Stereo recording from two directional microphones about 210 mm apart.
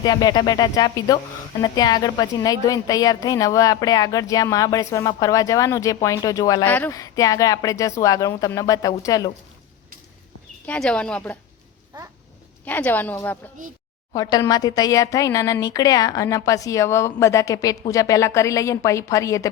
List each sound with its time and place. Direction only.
0.0 s a woman's voice: 20° left (ahead or behind)
10.7 s speech: 5° left (ahead or behind)
11.9 s speech: 20° right (ahead or behind)
12.6 s a woman's voice: 10° left (ahead or behind)